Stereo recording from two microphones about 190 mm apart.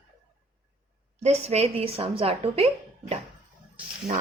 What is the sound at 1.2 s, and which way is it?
A woman's voice, 35° right (ahead or behind).